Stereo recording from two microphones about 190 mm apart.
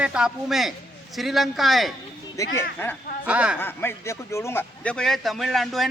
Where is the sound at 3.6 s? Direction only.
10° left (ahead or behind).